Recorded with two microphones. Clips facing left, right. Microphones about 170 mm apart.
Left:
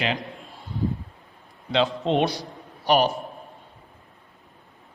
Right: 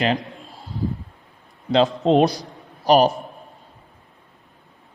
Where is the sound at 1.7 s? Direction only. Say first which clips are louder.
Right 6 dB; 40° right (ahead or behind).